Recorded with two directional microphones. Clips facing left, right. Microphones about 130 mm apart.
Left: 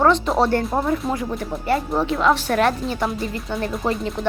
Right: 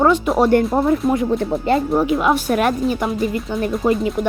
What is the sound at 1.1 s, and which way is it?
Speech, 25° right (ahead or behind).